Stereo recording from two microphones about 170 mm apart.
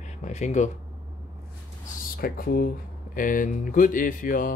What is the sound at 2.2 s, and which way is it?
Speech, 60° left (ahead or behind).